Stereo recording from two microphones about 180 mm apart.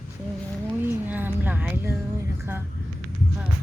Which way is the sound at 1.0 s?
10° right (ahead or behind).